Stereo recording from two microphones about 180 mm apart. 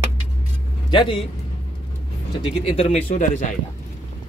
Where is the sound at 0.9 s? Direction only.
25° left (ahead or behind).